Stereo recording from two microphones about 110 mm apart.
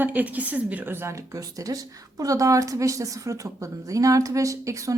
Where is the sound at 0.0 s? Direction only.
15° right (ahead or behind).